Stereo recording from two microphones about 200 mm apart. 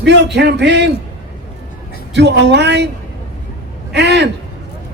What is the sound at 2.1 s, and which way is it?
Speech, 60° right (ahead or behind).